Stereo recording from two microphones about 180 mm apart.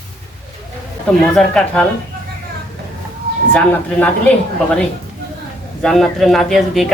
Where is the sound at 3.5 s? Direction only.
10° left (ahead or behind).